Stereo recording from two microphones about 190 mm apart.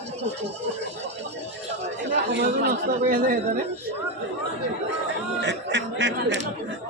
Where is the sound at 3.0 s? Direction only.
50° right (ahead or behind).